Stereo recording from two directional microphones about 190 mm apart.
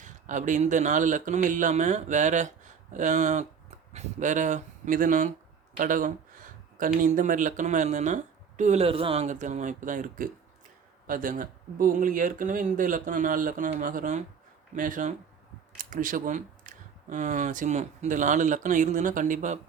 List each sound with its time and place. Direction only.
0.0 s speech: 40° right (ahead or behind)